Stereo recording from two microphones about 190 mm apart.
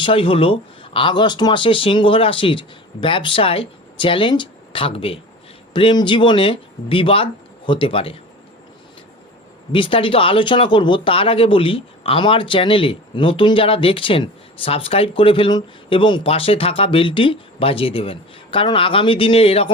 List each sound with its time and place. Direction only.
0.0 s speech: 30° left (ahead or behind)
9.7 s speech: 25° left (ahead or behind)